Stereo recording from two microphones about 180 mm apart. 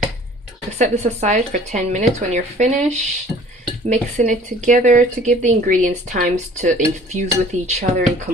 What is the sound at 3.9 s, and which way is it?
A woman's voice, 45° right (ahead or behind).